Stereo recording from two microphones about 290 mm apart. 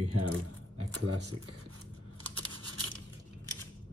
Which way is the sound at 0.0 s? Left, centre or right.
Right.